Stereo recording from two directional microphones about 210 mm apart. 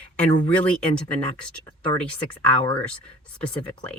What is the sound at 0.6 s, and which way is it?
Speech, 5° left (ahead or behind).